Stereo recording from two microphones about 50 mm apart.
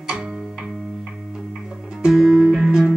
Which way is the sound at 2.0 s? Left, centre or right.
Centre.